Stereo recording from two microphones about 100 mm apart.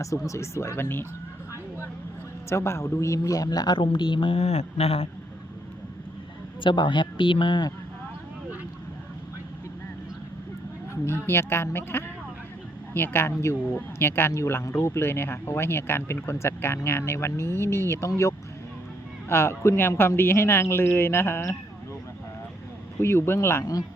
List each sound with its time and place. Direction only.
0.3 s speech: 30° left (ahead or behind)
2.5 s a man's voice: 25° left (ahead or behind)
3.8 s a woman's voice: 55° left (ahead or behind); by 5.0 s 85° left
6.6 s speech: 55° left (ahead or behind)
11.0 s speech: 25° left (ahead or behind)
23.0 s speech: 25° left (ahead or behind)